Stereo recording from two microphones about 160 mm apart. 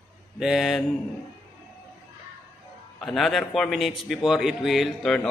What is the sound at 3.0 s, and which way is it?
A man's voice, centre (ahead or behind).